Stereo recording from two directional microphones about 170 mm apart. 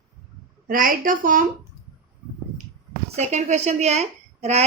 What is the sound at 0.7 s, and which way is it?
Speech, 55° right (ahead or behind).